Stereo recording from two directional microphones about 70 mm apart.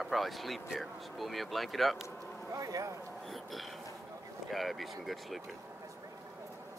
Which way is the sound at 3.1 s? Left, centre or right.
Centre.